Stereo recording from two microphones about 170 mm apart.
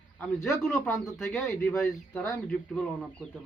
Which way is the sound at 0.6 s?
5° left (ahead or behind).